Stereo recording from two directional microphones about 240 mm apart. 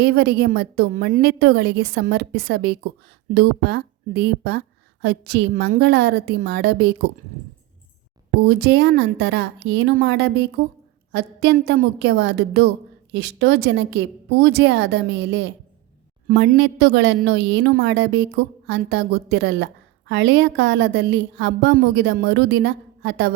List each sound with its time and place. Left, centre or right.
0.0 s a woman's voice: right
8.4 s a woman's voice: right